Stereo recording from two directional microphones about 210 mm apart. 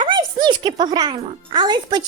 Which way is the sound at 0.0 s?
20° right (ahead or behind).